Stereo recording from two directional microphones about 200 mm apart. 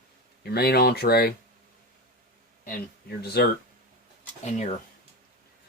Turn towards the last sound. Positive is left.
turn(degrees=35)  # may be behind; listen again after turning